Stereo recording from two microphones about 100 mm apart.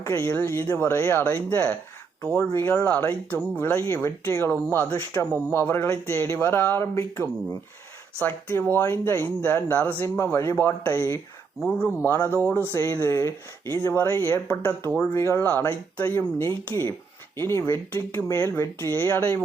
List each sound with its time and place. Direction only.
0.0 s speech: 25° left (ahead or behind)